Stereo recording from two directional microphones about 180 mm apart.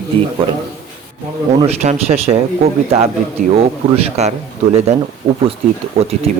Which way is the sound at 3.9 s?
35° right (ahead or behind).